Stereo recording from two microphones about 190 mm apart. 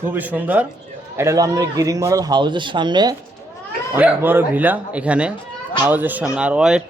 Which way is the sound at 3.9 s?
10° right (ahead or behind).